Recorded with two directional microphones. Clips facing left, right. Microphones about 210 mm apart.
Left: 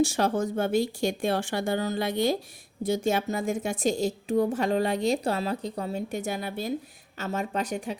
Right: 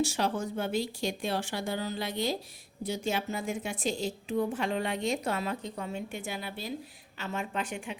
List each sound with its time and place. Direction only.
0.0 s a woman's voice: 45° left (ahead or behind)